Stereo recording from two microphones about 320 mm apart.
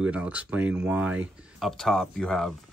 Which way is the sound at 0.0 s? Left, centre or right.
Centre.